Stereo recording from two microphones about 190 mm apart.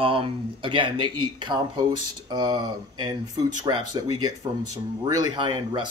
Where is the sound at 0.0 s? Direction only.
30° right (ahead or behind).